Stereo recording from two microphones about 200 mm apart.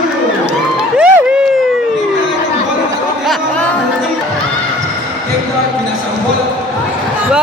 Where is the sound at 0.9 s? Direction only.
5° right (ahead or behind).